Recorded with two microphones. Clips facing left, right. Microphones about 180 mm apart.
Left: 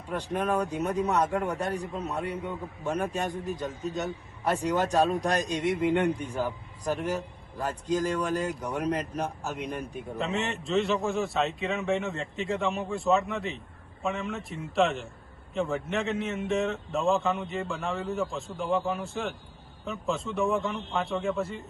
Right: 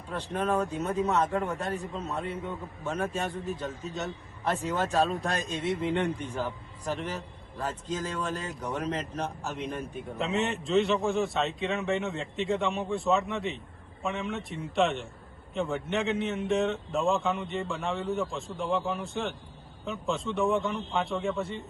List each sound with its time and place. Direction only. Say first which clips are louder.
0.4 s a man's voice: right 1 dB; centre (ahead or behind)
1.0 s a man's voice: even; 15° left (ahead or behind)
1.3 s a man's voice: left 1 dB; centre (ahead or behind)
1.5 s a man's voice: left 2 dB; 15° left (ahead or behind)
9.6 s a man's voice: even; centre (ahead or behind)